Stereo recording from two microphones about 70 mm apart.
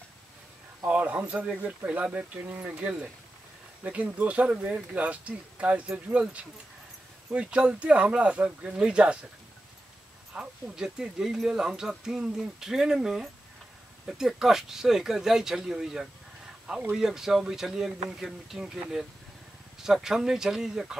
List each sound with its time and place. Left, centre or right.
0.8 s speech: right
7.3 s speech: centre
10.3 s speech: centre